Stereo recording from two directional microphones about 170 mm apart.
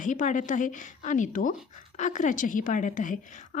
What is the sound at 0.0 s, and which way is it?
Speech, 50° left (ahead or behind).